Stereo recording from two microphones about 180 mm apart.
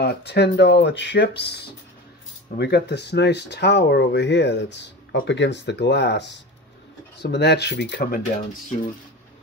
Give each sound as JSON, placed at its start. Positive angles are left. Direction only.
{"t": 0.0, "sound": "speech", "side_deg": 65}